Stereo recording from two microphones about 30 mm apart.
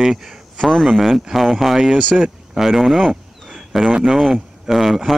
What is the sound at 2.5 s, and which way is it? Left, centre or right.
Speech, centre.